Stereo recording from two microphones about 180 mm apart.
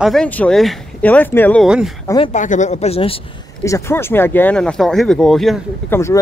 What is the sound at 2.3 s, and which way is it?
Speech, 45° left (ahead or behind).